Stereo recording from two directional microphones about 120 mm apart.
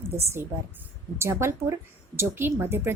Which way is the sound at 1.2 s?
20° right (ahead or behind).